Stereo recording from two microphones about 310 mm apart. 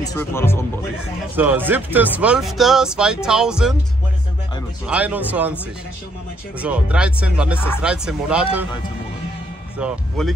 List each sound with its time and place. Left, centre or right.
0.0 s speech: centre
1.3 s speech: centre
4.8 s speech: centre
6.6 s speech: centre
9.8 s speech: centre